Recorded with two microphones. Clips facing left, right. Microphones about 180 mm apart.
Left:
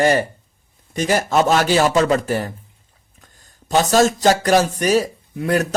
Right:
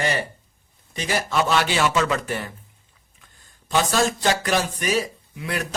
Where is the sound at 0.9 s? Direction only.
45° left (ahead or behind).